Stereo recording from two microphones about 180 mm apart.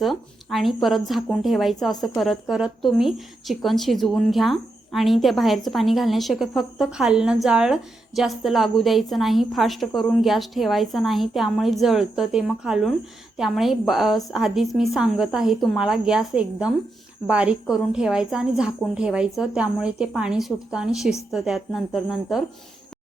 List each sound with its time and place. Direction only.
0.0 s a woman's voice: centre (ahead or behind)